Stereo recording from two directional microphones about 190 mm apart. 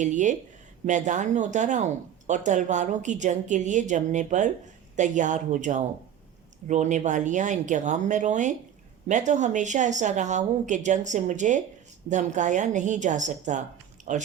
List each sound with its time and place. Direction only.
0.0 s speech: 40° right (ahead or behind)